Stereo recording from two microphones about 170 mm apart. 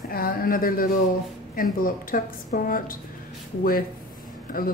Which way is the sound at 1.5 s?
55° left (ahead or behind).